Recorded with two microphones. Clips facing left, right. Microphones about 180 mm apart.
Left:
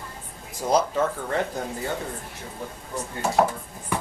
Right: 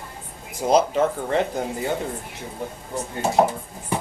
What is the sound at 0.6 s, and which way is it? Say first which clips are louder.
Speech: right 4 dB; 20° right (ahead or behind).